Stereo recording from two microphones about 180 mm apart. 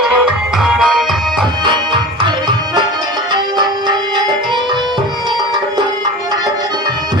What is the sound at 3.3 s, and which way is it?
Music, 25° right (ahead or behind).